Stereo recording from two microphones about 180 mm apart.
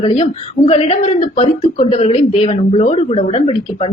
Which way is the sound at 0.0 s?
35° left (ahead or behind).